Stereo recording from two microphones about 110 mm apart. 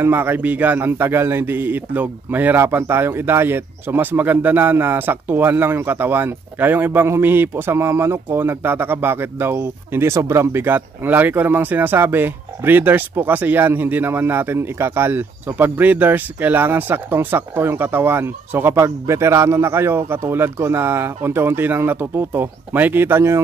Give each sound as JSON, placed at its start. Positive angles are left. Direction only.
{"t": 0.0, "sound": "a man's voice", "side_deg": -20}